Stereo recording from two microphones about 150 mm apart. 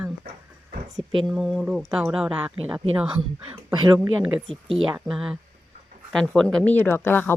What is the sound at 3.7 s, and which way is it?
Speech, 20° right (ahead or behind).